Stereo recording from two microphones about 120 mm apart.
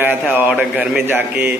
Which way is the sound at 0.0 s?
10° right (ahead or behind).